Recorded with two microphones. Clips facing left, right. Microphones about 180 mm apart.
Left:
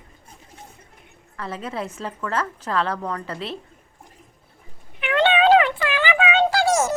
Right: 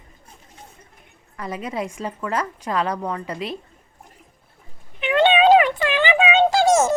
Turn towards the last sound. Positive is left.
turn(degrees=-25)  # may be behind; listen again after turning